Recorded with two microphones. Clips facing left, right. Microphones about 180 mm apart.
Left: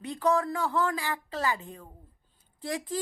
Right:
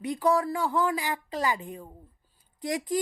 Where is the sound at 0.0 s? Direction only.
10° right (ahead or behind).